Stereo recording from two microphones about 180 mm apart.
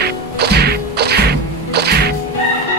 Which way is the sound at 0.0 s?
65° right (ahead or behind).